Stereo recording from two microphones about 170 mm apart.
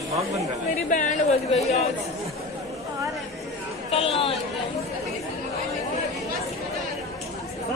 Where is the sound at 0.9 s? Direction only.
45° left (ahead or behind).